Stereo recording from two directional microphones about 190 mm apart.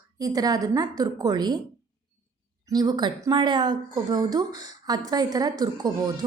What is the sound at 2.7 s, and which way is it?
A woman's voice, 20° right (ahead or behind).